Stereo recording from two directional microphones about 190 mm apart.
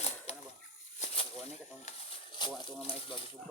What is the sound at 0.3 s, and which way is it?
Chicken, 30° left (ahead or behind).